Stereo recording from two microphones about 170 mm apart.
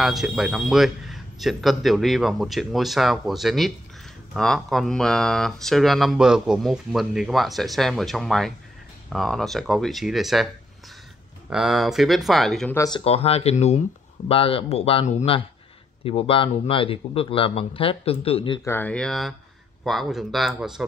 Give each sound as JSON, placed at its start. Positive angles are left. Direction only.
{"t": 0.0, "sound": "speech", "side_deg": 0}
{"t": 11.5, "sound": "speech", "side_deg": 0}
{"t": 12.7, "sound": "speech", "side_deg": 20}
{"t": 13.0, "sound": "a man's voice", "side_deg": 35}
{"t": 18.6, "sound": "speech", "side_deg": 15}